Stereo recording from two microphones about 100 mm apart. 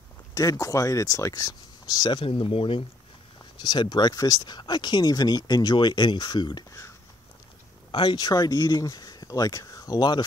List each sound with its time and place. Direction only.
0.3 s speech: 35° left (ahead or behind); by 2.8 s 65° left (ahead or behind)
3.5 s speech: 45° left (ahead or behind)
7.9 s speech: 50° left (ahead or behind)